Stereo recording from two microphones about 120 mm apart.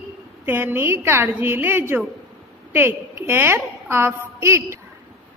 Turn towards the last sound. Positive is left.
turn(degrees=-20)  # may be behind; listen again after turning